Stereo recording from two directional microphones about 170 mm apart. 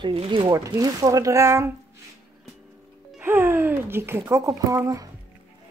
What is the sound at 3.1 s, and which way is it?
Speech, 15° right (ahead or behind).